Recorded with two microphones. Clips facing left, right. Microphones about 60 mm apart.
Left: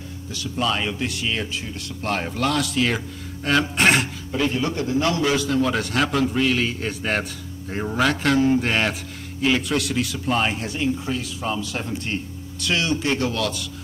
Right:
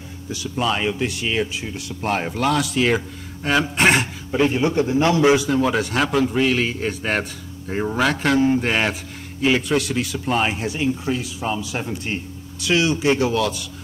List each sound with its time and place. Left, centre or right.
0.3 s a man's voice: centre
4.3 s a man's voice: right; by 13.7 s centre